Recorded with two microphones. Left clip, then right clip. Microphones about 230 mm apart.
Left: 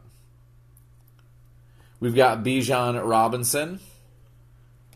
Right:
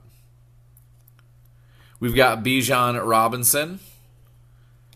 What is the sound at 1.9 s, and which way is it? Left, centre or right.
Speech, right.